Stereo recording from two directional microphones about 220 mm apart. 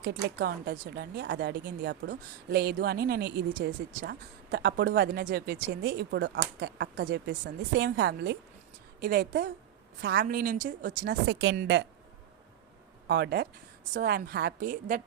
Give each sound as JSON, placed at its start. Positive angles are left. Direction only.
{"t": 0.0, "sound": "speech", "side_deg": -50}
{"t": 10.2, "sound": "a woman's voice", "side_deg": -40}
{"t": 10.8, "sound": "speech", "side_deg": -50}
{"t": 13.1, "sound": "a woman's voice", "side_deg": -50}